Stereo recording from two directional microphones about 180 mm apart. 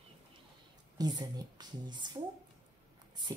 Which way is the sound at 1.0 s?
20° right (ahead or behind).